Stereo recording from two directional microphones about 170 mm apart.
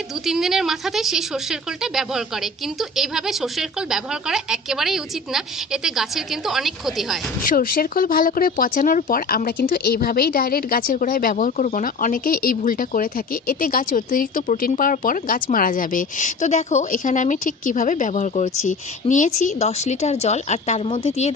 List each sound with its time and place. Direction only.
0.3 s speech: centre (ahead or behind)
7.4 s speech: 60° left (ahead or behind); by 21.3 s 40° left (ahead or behind)